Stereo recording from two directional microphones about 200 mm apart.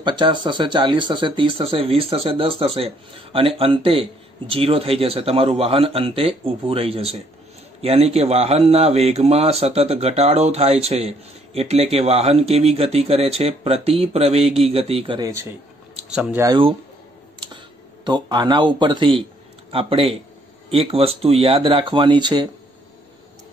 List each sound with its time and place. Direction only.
0.0 s speech: 20° right (ahead or behind)
16.1 s speech: 5° right (ahead or behind)
16.4 s speech: 25° right (ahead or behind)
18.0 s speech: 20° right (ahead or behind)